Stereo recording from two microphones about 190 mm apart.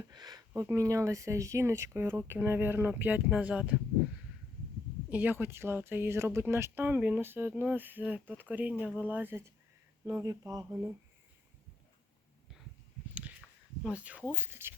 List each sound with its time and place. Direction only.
0.1 s speech: 20° right (ahead or behind)
5.0 s speech: 10° right (ahead or behind)
13.8 s speech: 5° right (ahead or behind)